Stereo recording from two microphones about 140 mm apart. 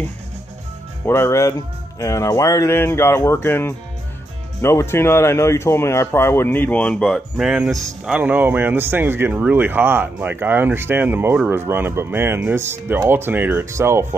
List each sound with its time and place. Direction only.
1.0 s speech: 20° left (ahead or behind)
7.1 s speech: 5° right (ahead or behind); by 14.0 s 20° right (ahead or behind)